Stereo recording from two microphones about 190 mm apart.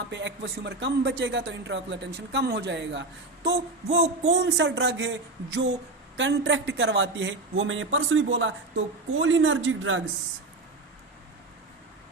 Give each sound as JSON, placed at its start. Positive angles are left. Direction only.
{"t": 0.1, "sound": "speech", "side_deg": -70}